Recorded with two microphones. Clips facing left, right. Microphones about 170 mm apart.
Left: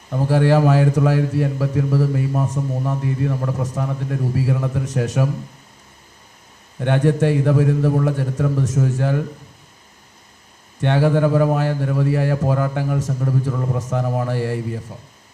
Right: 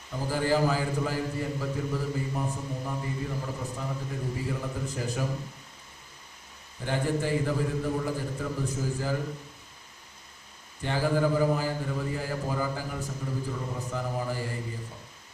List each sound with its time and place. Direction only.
0.1 s a man's voice: 70° left (ahead or behind)
6.7 s a man's voice: 70° left (ahead or behind)
10.8 s a man's voice: 75° left (ahead or behind)